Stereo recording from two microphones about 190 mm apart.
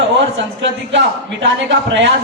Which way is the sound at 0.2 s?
70° right (ahead or behind).